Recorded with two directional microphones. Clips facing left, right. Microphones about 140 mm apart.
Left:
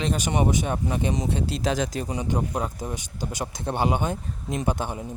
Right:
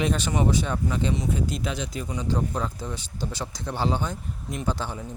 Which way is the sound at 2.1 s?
20° left (ahead or behind).